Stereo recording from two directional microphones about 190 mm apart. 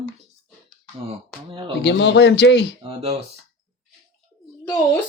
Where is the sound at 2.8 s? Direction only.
30° right (ahead or behind).